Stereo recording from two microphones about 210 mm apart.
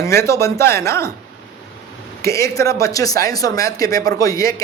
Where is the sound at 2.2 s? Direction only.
15° left (ahead or behind).